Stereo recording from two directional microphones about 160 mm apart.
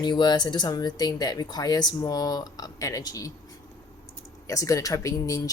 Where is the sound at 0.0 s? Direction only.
30° left (ahead or behind).